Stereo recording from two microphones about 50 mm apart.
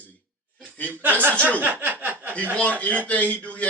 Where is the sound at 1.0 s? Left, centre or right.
Right.